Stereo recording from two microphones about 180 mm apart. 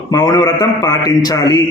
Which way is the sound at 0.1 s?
20° left (ahead or behind).